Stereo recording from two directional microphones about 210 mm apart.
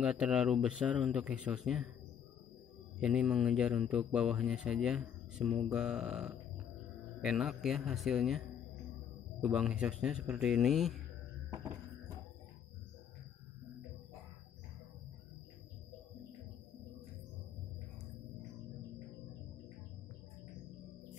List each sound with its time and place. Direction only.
0.0 s speech: 5° right (ahead or behind)
3.0 s speech: 5° right (ahead or behind)